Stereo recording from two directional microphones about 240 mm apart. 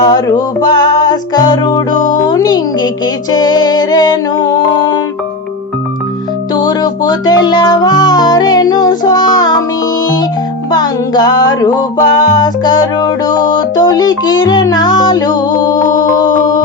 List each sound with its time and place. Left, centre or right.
0.0 s music: centre
6.5 s music: centre
10.7 s music: centre